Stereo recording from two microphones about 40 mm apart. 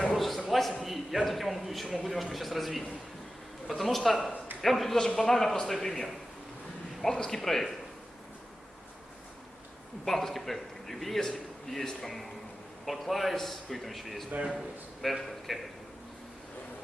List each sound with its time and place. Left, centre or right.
0.1 s a sound: centre
0.8 s a man's voice: centre
10.1 s a man's voice: centre
14.3 s a man's voice: right
15.1 s a man's voice: centre